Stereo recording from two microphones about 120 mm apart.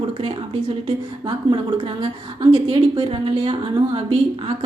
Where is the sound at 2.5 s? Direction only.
50° right (ahead or behind).